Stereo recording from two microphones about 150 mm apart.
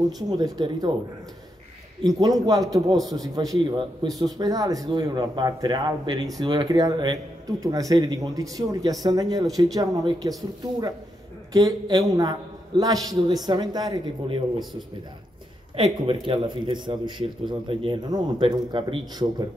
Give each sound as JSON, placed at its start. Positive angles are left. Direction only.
{"t": 0.3, "sound": "speech", "side_deg": -25}
{"t": 2.1, "sound": "speech", "side_deg": -25}
{"t": 11.5, "sound": "speech", "side_deg": -25}
{"t": 15.7, "sound": "a man's voice", "side_deg": -35}